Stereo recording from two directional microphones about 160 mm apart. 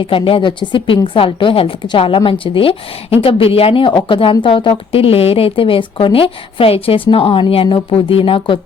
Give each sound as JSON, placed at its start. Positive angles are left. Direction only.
{"t": 0.0, "sound": "a woman's voice", "side_deg": 30}